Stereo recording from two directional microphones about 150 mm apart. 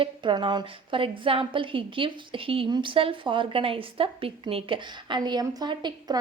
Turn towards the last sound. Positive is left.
turn(degrees=-30)  # may be behind; listen again after turning